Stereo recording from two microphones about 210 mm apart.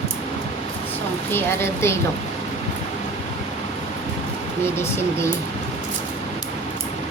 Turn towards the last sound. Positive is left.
turn(degrees=10)  # may be behind; listen again after turning